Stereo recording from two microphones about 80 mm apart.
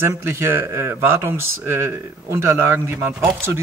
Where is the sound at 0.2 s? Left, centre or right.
Right.